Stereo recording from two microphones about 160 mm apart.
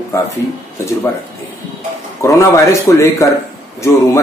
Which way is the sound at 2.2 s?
20° left (ahead or behind).